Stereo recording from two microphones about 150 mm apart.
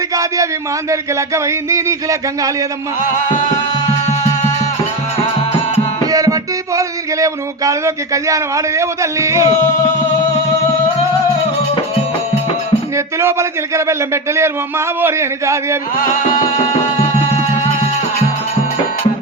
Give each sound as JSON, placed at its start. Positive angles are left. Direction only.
{"t": 0.1, "sound": "a sound", "side_deg": -20}
{"t": 0.9, "sound": "music", "side_deg": -20}
{"t": 6.1, "sound": "music", "side_deg": -25}
{"t": 13.1, "sound": "music", "side_deg": -20}
{"t": 15.0, "sound": "speech", "side_deg": -20}